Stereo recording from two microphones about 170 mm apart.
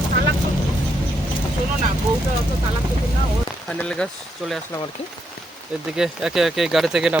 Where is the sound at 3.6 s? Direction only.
5° left (ahead or behind).